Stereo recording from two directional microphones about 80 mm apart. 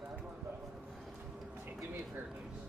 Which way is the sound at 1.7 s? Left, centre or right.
Right.